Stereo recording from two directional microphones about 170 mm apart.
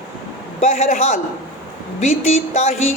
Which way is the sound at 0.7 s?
45° left (ahead or behind).